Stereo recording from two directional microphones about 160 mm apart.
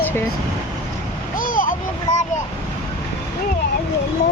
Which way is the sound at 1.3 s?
60° left (ahead or behind).